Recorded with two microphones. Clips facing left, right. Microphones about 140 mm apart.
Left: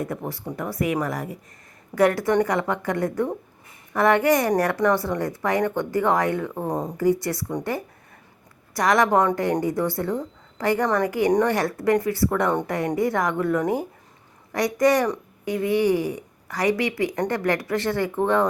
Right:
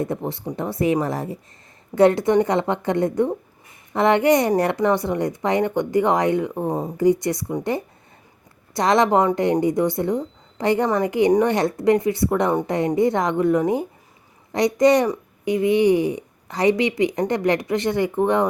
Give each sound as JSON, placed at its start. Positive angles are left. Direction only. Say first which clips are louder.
{"t": 0.0, "sound": "a woman's voice", "louder": "right 4 dB", "side_deg": -25}
{"t": 6.9, "sound": "a woman's voice", "louder": "right 4 dB", "side_deg": -20}